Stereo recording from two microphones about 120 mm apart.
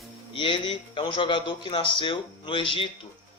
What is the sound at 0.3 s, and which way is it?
A man's voice, 45° left (ahead or behind).